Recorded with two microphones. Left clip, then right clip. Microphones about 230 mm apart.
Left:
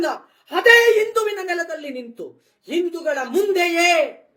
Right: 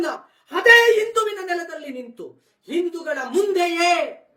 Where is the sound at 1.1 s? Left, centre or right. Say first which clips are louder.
Left 1 dB; centre.